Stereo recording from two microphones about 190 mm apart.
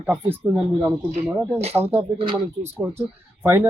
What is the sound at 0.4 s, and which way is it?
Speech, 10° right (ahead or behind).